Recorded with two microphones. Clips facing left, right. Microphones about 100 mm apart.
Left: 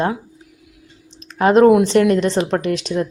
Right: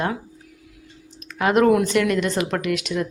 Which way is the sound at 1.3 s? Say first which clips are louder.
Left 6 dB; 30° left (ahead or behind).